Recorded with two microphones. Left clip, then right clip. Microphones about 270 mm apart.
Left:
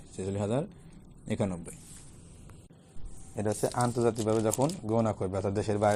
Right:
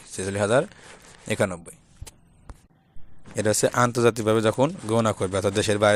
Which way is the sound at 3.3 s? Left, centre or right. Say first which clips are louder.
Right 9 dB; right.